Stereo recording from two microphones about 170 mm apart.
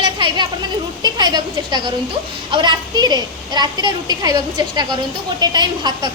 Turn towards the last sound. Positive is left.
turn(degrees=-25)  # may be behind; listen again after turning